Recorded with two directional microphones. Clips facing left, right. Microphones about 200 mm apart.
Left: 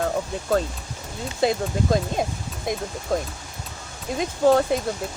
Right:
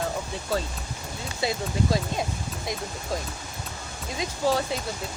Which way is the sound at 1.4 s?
50° left (ahead or behind).